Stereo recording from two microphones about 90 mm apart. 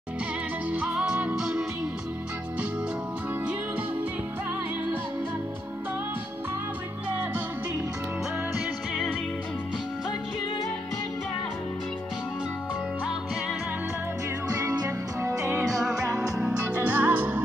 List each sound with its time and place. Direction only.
0.7 s music: 15° right (ahead or behind)
14.5 s music: 40° right (ahead or behind)
16.3 s music: 10° right (ahead or behind)